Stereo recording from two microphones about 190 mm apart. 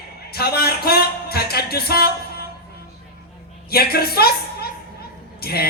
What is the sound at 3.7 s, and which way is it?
A woman's voice, 55° left (ahead or behind).